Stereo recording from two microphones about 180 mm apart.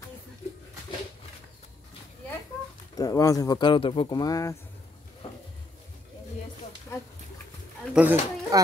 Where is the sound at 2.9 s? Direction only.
20° left (ahead or behind).